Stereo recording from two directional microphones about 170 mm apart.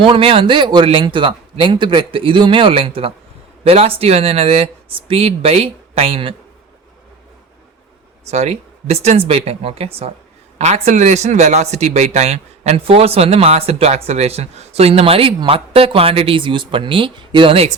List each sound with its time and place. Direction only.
0.0 s a man's voice: 35° right (ahead or behind)
8.3 s a man's voice: 40° right (ahead or behind)